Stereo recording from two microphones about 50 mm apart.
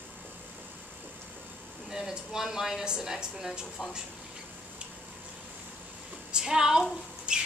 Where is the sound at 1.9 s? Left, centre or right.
Centre.